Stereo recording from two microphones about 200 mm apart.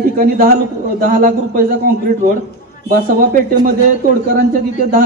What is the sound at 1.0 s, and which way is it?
Speech, 45° right (ahead or behind).